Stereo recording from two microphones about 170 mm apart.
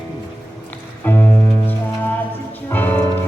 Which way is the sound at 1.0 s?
10° left (ahead or behind).